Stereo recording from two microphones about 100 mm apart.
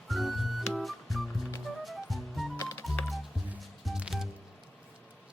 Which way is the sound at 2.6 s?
30° left (ahead or behind).